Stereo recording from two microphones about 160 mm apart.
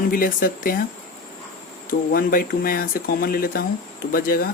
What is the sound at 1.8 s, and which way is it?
Speech, 65° left (ahead or behind).